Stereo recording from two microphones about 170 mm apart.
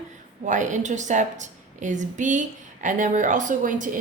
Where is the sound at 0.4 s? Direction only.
45° right (ahead or behind).